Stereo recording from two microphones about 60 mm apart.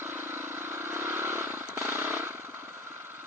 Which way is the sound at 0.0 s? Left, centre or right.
Right.